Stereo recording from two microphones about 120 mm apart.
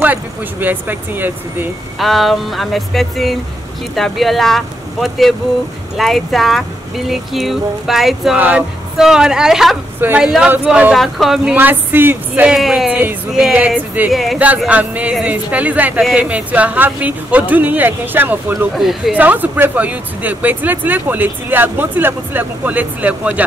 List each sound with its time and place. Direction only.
0.0 s speech: 15° right (ahead or behind)
2.0 s music: centre (ahead or behind)
9.9 s a woman's voice: 15° right (ahead or behind)
10.2 s music: 5° right (ahead or behind)
11.5 s speech: 15° right (ahead or behind)
12.5 s music: 5° right (ahead or behind)
13.3 s speech: 5° right (ahead or behind)
14.1 s music: centre (ahead or behind)
14.7 s speech: 10° right (ahead or behind)
16.0 s music: centre (ahead or behind)
16.3 s speech: 10° right (ahead or behind)
18.8 s music: centre (ahead or behind)
19.1 s speech: 15° right (ahead or behind)